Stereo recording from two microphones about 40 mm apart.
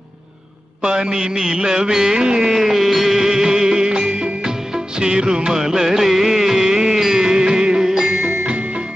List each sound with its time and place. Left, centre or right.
0.8 s music: right
2.6 s music: centre